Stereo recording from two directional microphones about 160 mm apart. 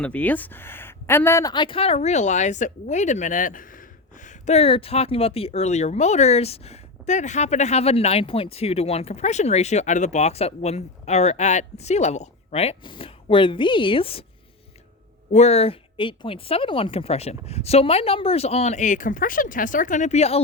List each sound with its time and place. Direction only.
0.0 s speech: 10° left (ahead or behind); by 14.3 s 35° left (ahead or behind)
15.3 s speech: 45° left (ahead or behind)